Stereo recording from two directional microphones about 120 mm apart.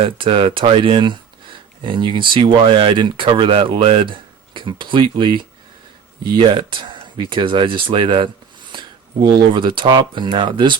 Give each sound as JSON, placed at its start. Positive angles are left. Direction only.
{"t": 0.0, "sound": "speech", "side_deg": -50}